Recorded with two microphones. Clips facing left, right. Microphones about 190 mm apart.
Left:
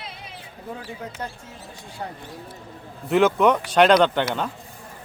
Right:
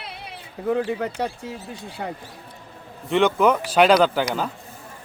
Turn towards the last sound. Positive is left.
turn(degrees=-5)  # may be behind; listen again after turning